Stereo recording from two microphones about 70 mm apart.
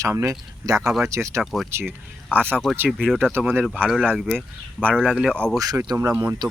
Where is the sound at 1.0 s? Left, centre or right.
Right.